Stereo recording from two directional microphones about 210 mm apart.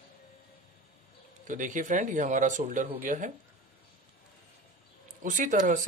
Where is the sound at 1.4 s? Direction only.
40° right (ahead or behind).